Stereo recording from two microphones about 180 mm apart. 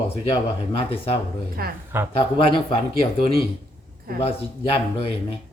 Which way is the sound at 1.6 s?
60° right (ahead or behind).